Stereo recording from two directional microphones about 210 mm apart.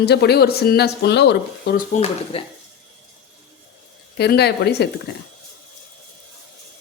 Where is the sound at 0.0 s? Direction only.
50° left (ahead or behind).